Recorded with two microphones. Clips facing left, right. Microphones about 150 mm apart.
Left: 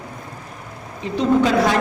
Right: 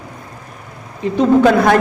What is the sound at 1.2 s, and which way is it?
Speech, 55° right (ahead or behind).